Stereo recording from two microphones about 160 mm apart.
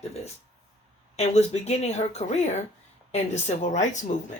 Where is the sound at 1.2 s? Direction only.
45° left (ahead or behind).